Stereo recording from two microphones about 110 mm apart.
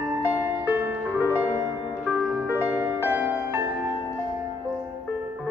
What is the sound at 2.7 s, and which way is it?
Music, 15° right (ahead or behind).